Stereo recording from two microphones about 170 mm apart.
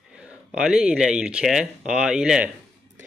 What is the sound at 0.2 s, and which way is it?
Speech, 5° right (ahead or behind).